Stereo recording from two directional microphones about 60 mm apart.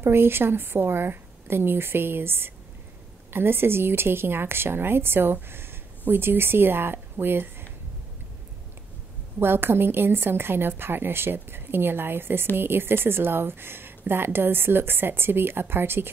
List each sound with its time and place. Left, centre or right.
0.0 s a woman's voice: right
9.4 s a woman's voice: right